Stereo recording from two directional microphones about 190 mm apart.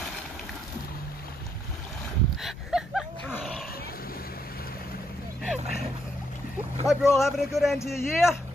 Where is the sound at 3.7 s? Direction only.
50° left (ahead or behind).